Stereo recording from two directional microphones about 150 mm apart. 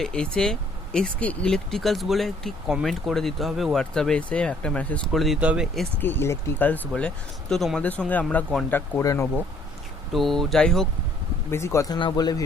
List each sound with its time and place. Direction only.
0.0 s speech: 5° left (ahead or behind)
6.0 s speech: 15° left (ahead or behind)
10.1 s speech: centre (ahead or behind)
11.5 s speech: 20° left (ahead or behind)
11.9 s speech: 30° left (ahead or behind)